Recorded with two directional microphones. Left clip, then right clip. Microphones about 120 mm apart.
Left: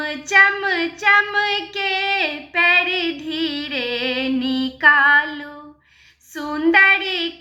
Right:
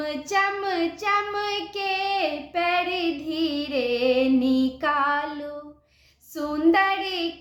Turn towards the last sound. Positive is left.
turn(degrees=-45)  # may be behind; listen again after turning